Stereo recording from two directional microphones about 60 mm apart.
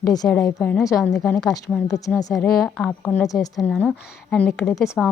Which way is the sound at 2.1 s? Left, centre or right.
Centre.